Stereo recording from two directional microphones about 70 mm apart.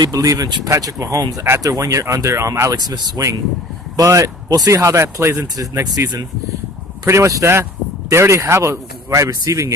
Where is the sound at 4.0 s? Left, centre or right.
Right.